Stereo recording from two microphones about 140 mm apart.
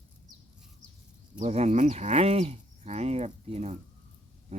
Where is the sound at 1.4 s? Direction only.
55° right (ahead or behind).